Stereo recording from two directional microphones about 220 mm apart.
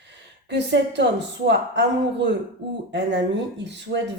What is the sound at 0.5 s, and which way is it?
Speech, 50° right (ahead or behind).